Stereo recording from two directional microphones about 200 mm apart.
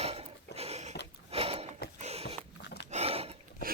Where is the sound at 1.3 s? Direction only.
30° right (ahead or behind).